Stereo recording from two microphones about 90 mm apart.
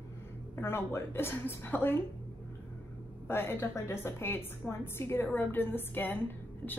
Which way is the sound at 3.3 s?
25° left (ahead or behind).